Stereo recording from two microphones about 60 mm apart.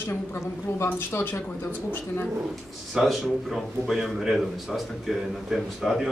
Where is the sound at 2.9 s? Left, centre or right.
Centre.